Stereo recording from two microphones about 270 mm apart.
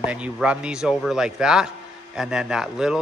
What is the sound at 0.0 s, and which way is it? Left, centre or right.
A man's voice, centre.